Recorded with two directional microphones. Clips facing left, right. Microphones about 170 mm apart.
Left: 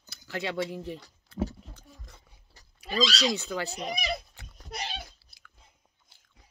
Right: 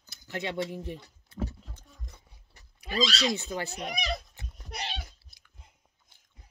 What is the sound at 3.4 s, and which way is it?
Speech, 20° right (ahead or behind).